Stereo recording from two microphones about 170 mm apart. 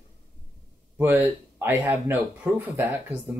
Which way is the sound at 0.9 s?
10° right (ahead or behind).